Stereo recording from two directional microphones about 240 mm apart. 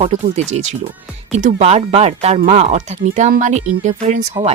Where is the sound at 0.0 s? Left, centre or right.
Right.